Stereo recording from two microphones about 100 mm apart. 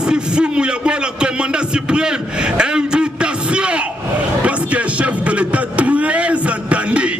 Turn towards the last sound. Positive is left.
turn(degrees=-10)  # may be behind; listen again after turning